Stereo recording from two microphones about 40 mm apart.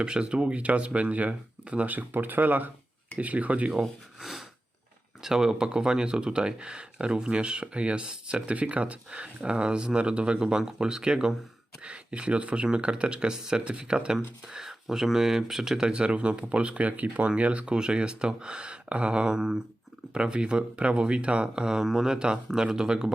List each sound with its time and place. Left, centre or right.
0.0 s speech: right
1.9 s speech: right
3.2 s speech: right
4.2 s a sound: centre
5.2 s speech: centre
15.9 s speech: right
17.7 s speech: right